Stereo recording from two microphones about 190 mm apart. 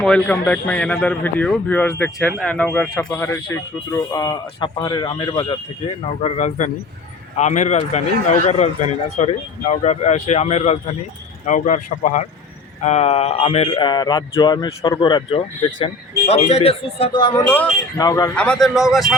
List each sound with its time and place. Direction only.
0.0 s a man's voice: 5° left (ahead or behind); by 17.4 s 25° left (ahead or behind)
17.4 s a man's voice: 10° left (ahead or behind)
18.3 s speech: 5° left (ahead or behind)